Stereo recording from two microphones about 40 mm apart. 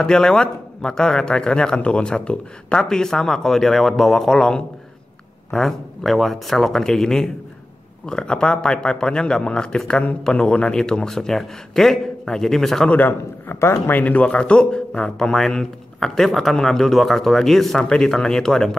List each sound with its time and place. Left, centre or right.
0.0 s a man's voice: centre
2.9 s speech: centre
4.3 s a man's voice: centre
11.1 s speech: centre
13.5 s speech: left
13.9 s speech: left
14.3 s a man's voice: left
15.1 s speech: centre
17.8 s speech: centre